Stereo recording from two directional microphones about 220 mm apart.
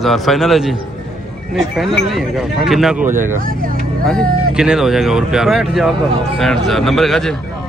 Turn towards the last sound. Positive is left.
turn(degrees=0)  # may be behind; listen again after turning